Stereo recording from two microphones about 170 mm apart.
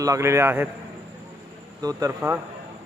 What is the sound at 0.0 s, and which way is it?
Speech, 20° right (ahead or behind).